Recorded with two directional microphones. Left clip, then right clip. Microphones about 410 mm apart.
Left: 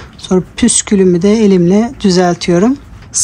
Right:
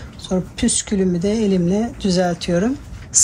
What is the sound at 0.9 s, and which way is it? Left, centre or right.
Speech, left.